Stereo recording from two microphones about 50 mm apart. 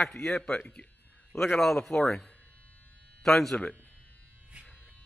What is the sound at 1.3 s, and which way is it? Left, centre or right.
Speech, left.